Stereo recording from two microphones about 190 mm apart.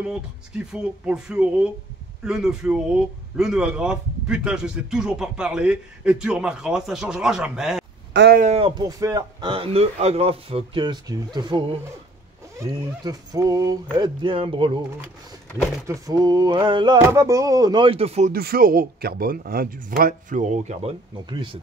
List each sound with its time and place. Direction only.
0.0 s a man's voice: 5° right (ahead or behind)
8.1 s speech: 65° right (ahead or behind)
8.4 s speech: 35° right (ahead or behind)
15.9 s speech: 20° right (ahead or behind)
18.3 s speech: 50° right (ahead or behind); by 21.5 s 25° right (ahead or behind)